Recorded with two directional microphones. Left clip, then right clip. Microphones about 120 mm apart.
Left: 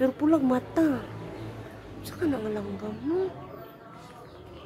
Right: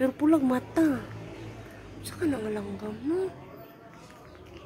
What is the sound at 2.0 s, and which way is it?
Speech, 15° right (ahead or behind).